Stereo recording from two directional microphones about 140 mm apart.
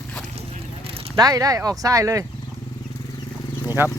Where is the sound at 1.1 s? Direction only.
25° right (ahead or behind).